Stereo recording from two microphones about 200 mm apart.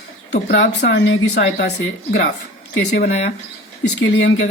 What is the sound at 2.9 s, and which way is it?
Speech, 55° left (ahead or behind).